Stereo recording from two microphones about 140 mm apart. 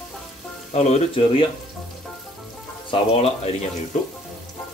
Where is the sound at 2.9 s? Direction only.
45° left (ahead or behind).